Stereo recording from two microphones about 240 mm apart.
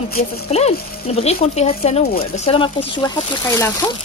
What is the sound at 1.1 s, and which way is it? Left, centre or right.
Speech, left.